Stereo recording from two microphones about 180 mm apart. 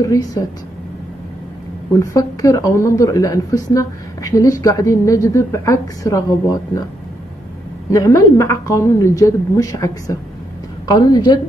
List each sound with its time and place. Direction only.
0.0 s a woman's voice: 20° left (ahead or behind)
2.0 s speech: 20° left (ahead or behind)
7.9 s a woman's voice: 15° left (ahead or behind)